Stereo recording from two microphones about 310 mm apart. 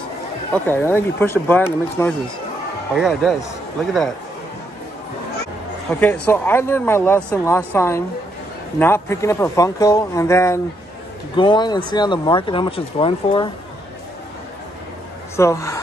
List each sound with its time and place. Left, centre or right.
0.5 s a man's voice: centre
5.9 s speech: centre
15.3 s speech: centre